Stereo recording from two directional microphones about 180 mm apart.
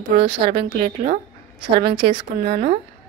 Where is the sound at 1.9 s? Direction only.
30° right (ahead or behind).